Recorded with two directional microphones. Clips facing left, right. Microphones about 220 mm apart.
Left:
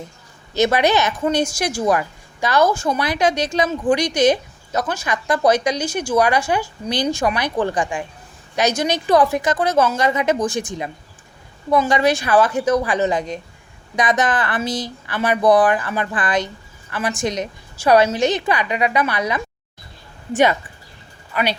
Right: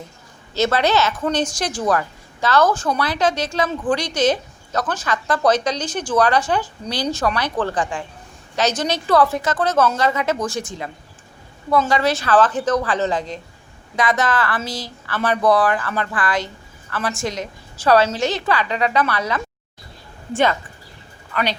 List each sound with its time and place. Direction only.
0.5 s a woman's voice: 15° left (ahead or behind)